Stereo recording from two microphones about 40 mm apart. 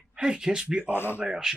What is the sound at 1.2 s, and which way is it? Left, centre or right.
Speech, centre.